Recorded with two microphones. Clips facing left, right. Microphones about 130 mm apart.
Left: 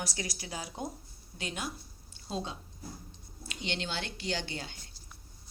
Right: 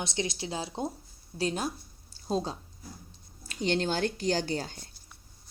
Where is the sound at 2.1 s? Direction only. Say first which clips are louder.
Right 7 dB; 35° right (ahead or behind).